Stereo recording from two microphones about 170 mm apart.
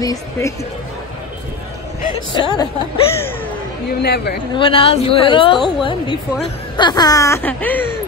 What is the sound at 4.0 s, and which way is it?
Speech, 75° left (ahead or behind).